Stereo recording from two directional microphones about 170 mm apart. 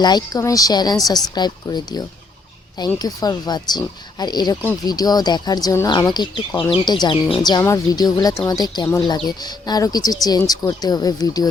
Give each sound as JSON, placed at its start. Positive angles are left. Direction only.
{"t": 0.0, "sound": "a woman's voice", "side_deg": 25}